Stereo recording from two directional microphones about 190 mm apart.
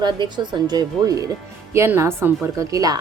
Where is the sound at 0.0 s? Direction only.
25° right (ahead or behind).